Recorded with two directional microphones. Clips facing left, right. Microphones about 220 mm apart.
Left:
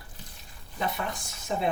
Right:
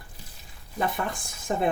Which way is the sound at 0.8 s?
50° right (ahead or behind).